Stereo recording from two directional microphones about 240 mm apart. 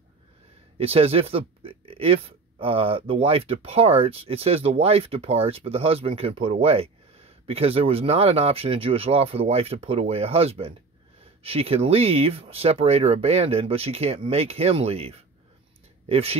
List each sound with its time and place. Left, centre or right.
0.7 s speech: right